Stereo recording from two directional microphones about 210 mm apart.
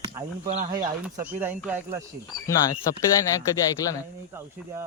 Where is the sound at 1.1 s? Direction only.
10° right (ahead or behind).